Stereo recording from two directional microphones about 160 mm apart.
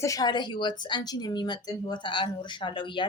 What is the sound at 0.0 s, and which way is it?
Speech, 20° left (ahead or behind).